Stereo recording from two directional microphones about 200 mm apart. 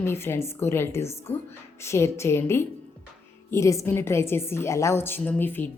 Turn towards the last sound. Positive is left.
turn(degrees=10)  # may be behind; listen again after turning